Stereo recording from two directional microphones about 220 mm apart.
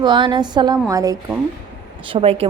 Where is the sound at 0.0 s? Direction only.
20° right (ahead or behind).